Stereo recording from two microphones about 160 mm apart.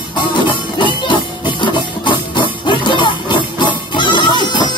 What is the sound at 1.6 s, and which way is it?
Music, 30° left (ahead or behind).